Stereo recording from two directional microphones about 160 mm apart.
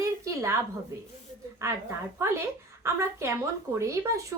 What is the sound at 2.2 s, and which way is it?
Speech, 15° right (ahead or behind).